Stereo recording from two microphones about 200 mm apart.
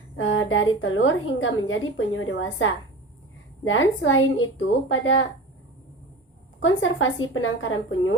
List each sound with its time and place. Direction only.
0.2 s a woman's voice: 75° left (ahead or behind)
6.6 s a woman's voice: 75° left (ahead or behind)